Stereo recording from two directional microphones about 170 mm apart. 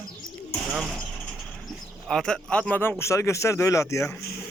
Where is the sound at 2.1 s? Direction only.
5° left (ahead or behind).